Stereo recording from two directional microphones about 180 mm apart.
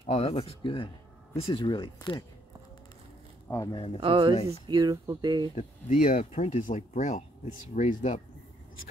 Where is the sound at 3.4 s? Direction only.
20° left (ahead or behind).